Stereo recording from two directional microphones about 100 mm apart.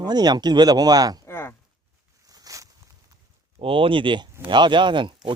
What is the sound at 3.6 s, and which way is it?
Speech, 60° right (ahead or behind).